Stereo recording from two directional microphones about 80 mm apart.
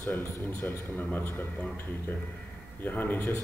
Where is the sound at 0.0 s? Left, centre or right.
Left.